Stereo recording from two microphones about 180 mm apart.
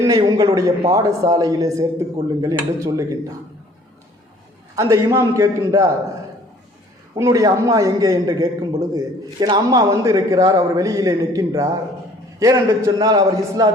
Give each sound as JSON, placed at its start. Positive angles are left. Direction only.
{"t": 0.0, "sound": "a man's voice", "side_deg": -20}
{"t": 4.7, "sound": "a man's voice", "side_deg": -20}
{"t": 7.2, "sound": "a man's voice", "side_deg": -20}